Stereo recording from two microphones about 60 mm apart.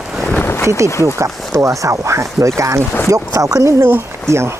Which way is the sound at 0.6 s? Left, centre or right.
Right.